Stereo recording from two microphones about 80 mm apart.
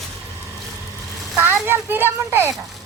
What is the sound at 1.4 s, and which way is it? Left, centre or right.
A child's voice, right.